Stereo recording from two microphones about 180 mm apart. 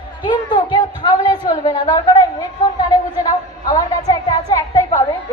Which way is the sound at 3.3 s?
20° left (ahead or behind).